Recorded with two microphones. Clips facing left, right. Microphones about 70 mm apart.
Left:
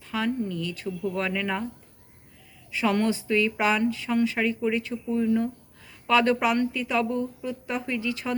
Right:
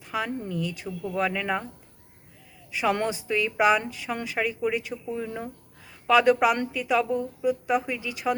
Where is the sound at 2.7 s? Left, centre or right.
Centre.